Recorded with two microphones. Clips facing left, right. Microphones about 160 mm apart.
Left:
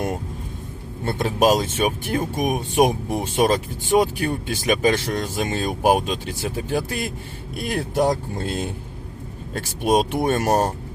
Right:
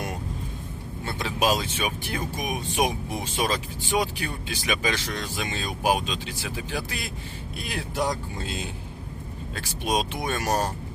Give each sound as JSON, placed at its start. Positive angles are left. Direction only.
{"t": 1.0, "sound": "speech", "side_deg": 45}